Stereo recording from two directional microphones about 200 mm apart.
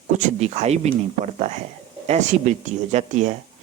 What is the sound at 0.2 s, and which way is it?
Speech, 35° right (ahead or behind).